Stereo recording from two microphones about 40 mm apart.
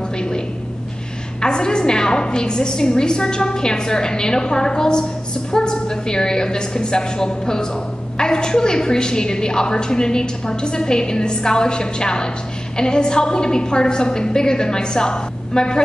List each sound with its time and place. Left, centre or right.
1.4 s a woman's voice: left